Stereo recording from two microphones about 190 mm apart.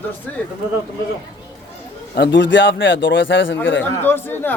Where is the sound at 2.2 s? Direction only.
70° left (ahead or behind).